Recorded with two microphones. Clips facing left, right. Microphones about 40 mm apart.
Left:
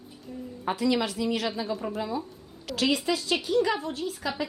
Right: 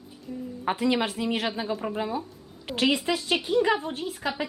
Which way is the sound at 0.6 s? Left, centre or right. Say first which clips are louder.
Right 1 dB; right.